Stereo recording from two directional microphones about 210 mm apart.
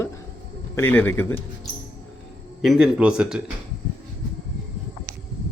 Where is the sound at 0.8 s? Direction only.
10° left (ahead or behind).